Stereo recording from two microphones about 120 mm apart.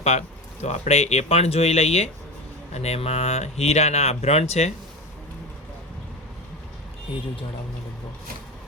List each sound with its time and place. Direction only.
0.0 s speech: 65° left (ahead or behind)